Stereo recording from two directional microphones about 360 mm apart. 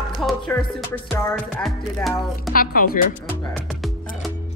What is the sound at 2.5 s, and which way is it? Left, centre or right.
Speech, left.